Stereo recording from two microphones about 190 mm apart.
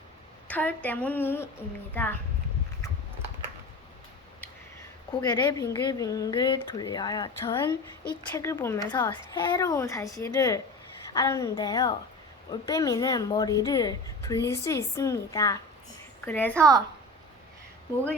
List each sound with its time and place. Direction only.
0.4 s speech: 10° left (ahead or behind)
5.2 s speech: 20° left (ahead or behind)